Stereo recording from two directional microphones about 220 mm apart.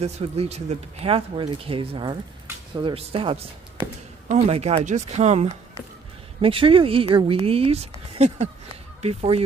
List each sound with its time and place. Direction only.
0.0 s speech: 30° right (ahead or behind)